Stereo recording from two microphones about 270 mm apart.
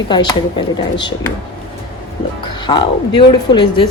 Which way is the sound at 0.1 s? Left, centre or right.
Centre.